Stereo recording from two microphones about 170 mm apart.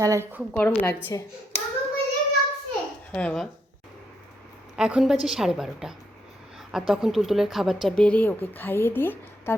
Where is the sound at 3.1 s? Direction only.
5° left (ahead or behind).